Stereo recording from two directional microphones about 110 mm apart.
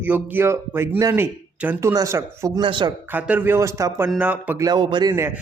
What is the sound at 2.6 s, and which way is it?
Speech, 45° right (ahead or behind).